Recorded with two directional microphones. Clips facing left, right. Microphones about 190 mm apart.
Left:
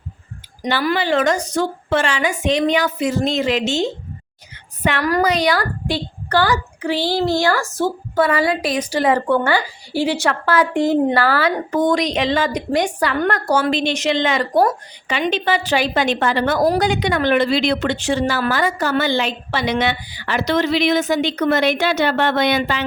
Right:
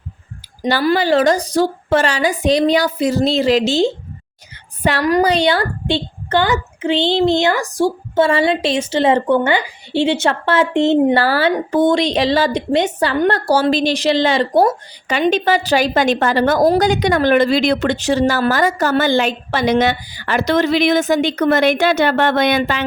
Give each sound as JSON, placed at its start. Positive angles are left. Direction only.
{"t": 0.7, "sound": "a woman's voice", "side_deg": -40}
{"t": 8.1, "sound": "a woman's voice", "side_deg": -25}
{"t": 15.0, "sound": "a woman's voice", "side_deg": -45}